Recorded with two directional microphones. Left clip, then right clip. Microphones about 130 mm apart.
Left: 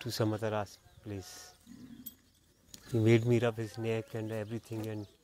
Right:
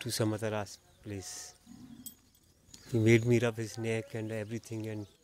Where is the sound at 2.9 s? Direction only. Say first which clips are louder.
Right 1 dB; 20° right (ahead or behind).